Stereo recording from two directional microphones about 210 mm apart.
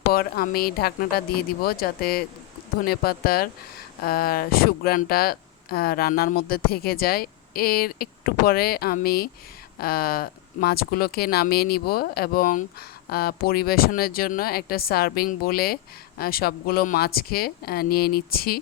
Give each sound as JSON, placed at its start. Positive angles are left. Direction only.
{"t": 0.1, "sound": "speech", "side_deg": 45}